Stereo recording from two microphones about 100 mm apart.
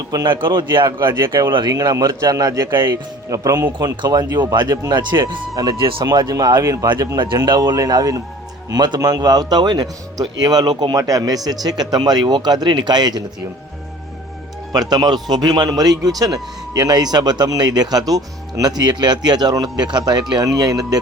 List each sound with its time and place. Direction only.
0.1 s a man's voice: 45° right (ahead or behind)
2.7 s a man's voice: 50° right (ahead or behind)
3.2 s a man's voice: 35° right (ahead or behind)
14.7 s a man's voice: 40° right (ahead or behind)